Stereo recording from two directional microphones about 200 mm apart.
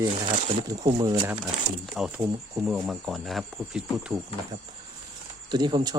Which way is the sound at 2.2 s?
15° right (ahead or behind).